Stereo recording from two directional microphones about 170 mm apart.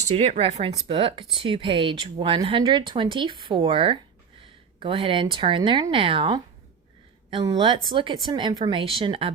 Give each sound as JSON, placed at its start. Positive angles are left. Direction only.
{"t": 0.1, "sound": "speech", "side_deg": -40}